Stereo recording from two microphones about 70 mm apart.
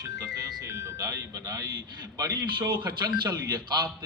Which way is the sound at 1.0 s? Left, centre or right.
Right.